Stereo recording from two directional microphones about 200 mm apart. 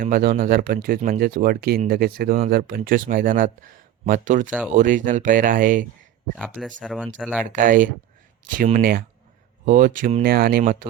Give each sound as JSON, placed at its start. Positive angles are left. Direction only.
{"t": 0.0, "sound": "speech", "side_deg": -45}
{"t": 6.8, "sound": "speech", "side_deg": 5}
{"t": 7.5, "sound": "speech", "side_deg": -40}
{"t": 10.2, "sound": "speech", "side_deg": -50}